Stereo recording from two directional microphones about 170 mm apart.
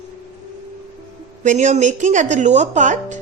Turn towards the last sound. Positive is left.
turn(degrees=-45)  # may be behind; listen again after turning